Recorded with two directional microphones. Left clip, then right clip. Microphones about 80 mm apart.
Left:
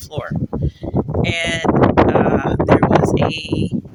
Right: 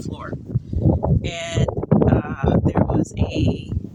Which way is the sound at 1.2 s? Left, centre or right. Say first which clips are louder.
Left 8 dB; centre.